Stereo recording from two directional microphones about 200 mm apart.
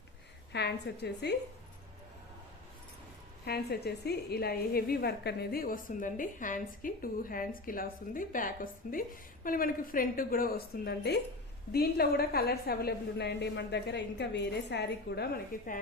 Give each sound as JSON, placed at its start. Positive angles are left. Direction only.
{"t": 0.5, "sound": "a woman's voice", "side_deg": 55}
{"t": 3.4, "sound": "a woman's voice", "side_deg": 55}